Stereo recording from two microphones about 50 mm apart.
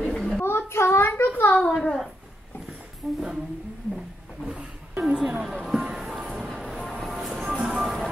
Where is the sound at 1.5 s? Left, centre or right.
Left.